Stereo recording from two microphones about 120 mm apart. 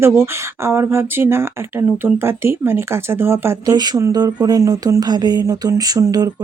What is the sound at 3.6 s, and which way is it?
Speech, 35° right (ahead or behind).